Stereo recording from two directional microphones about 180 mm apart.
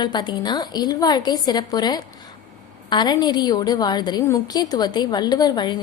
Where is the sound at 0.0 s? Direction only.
25° left (ahead or behind).